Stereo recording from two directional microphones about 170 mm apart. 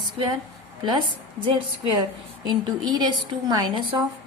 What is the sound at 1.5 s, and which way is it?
A woman's voice, 30° right (ahead or behind).